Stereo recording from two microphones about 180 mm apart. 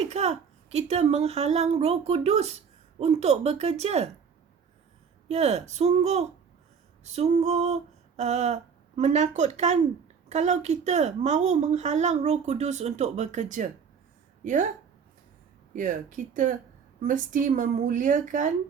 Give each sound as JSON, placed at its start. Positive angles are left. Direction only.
{"t": 0.0, "sound": "a woman's voice", "side_deg": -35}
{"t": 5.3, "sound": "a woman's voice", "side_deg": -35}
{"t": 7.0, "sound": "a sound", "side_deg": -40}
{"t": 10.2, "sound": "a woman's voice", "side_deg": -40}
{"t": 15.7, "sound": "speech", "side_deg": -45}